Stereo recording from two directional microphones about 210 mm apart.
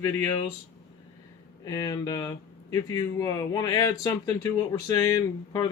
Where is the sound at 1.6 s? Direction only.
15° left (ahead or behind).